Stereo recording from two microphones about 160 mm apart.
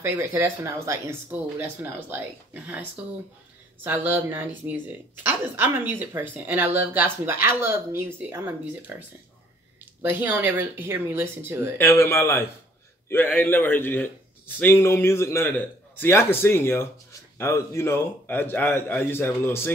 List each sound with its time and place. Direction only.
0.0 s speech: 15° right (ahead or behind)
3.8 s speech: 10° right (ahead or behind)
10.0 s speech: 10° right (ahead or behind)
11.8 s a man's voice: 15° left (ahead or behind)